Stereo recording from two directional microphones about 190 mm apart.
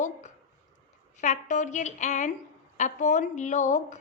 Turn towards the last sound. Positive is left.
turn(degrees=40)  # may be behind; listen again after turning